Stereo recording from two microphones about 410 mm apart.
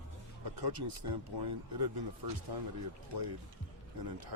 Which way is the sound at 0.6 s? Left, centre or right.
Right.